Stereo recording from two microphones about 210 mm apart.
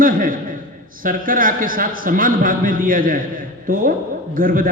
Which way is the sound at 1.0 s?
40° right (ahead or behind).